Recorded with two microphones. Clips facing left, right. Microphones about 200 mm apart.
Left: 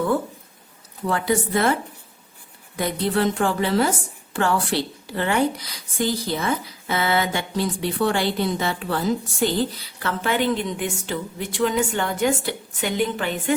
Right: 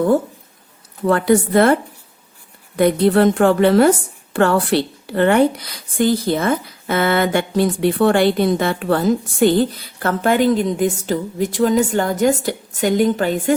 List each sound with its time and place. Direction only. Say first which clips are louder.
1.0 s a woman's voice: right 8 dB; 60° right (ahead or behind); by 13.5 s 40° right (ahead or behind)